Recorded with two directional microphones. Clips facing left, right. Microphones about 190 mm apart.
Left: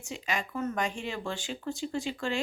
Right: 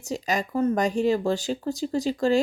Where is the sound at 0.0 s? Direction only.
40° right (ahead or behind).